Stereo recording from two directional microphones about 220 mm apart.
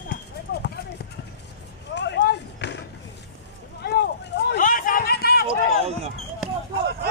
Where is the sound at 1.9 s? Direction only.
50° left (ahead or behind).